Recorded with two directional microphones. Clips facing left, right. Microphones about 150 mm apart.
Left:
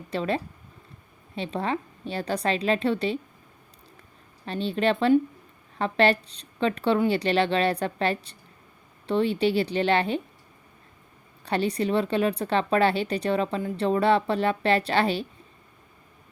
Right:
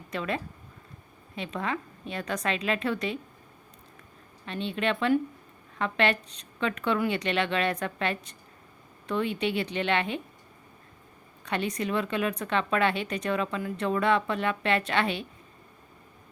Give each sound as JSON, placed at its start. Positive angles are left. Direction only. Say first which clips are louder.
{"t": 0.1, "sound": "speech", "louder": "left 4 dB", "side_deg": 30}
{"t": 4.4, "sound": "speech", "louder": "left 5 dB", "side_deg": 35}
{"t": 11.4, "sound": "speech", "louder": "left 5 dB", "side_deg": 35}